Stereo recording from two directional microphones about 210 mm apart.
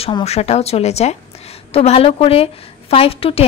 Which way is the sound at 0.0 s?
30° left (ahead or behind).